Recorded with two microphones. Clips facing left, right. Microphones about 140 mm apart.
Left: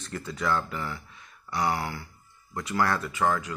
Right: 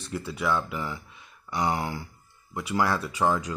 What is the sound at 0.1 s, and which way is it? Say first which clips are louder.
Speech: right 1 dB; 10° right (ahead or behind).